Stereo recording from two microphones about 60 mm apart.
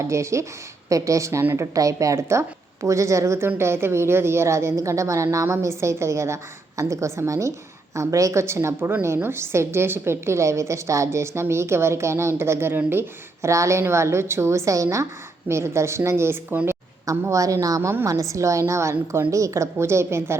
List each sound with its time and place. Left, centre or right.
0.0 s a woman's voice: right
0.9 s a woman's voice: right
15.4 s a woman's voice: right
17.3 s a woman's voice: right